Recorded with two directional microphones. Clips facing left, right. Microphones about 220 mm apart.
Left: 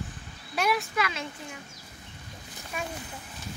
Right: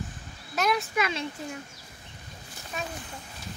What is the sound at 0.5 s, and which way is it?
Speech, 10° left (ahead or behind).